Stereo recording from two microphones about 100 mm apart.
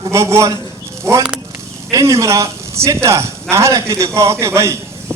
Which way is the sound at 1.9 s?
35° right (ahead or behind).